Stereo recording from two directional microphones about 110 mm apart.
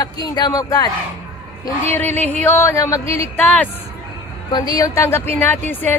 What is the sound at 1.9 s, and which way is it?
Speech, 15° left (ahead or behind).